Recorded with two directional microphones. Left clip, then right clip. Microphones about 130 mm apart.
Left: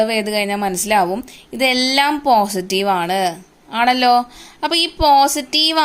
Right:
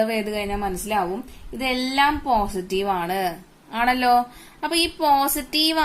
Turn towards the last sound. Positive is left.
turn(degrees=35)  # may be behind; listen again after turning